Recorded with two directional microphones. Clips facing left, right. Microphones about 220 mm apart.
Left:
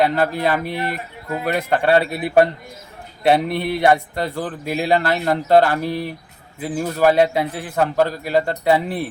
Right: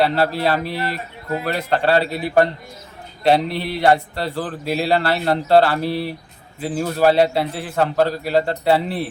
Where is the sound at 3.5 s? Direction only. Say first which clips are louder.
Left 3 dB; 50° left (ahead or behind).